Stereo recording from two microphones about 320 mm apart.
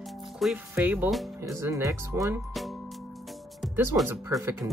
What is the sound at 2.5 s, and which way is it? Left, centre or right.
Music, centre.